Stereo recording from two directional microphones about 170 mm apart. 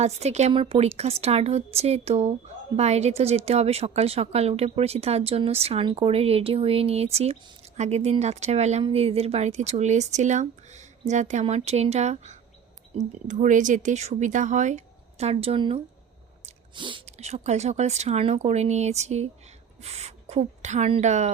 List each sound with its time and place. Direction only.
0.0 s a woman's voice: 40° right (ahead or behind)